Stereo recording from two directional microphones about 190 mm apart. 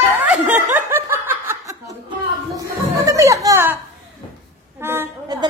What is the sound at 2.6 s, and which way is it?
A woman's voice, 15° right (ahead or behind).